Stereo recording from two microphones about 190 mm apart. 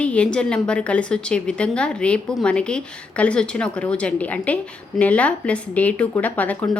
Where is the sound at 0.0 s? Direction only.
5° left (ahead or behind).